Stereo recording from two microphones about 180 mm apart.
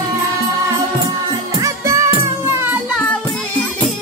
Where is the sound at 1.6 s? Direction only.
15° right (ahead or behind).